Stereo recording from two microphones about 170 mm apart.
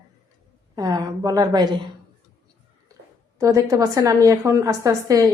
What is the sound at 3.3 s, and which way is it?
A woman's voice, 20° right (ahead or behind).